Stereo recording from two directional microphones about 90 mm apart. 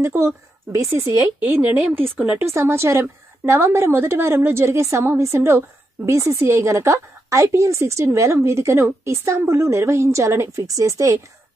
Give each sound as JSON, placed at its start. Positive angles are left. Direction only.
{"t": 0.0, "sound": "a woman's voice", "side_deg": -30}
{"t": 1.4, "sound": "a woman's voice", "side_deg": -20}
{"t": 2.3, "sound": "a woman's voice", "side_deg": -30}